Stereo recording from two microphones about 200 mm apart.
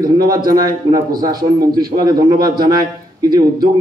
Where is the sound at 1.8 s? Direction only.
50° right (ahead or behind).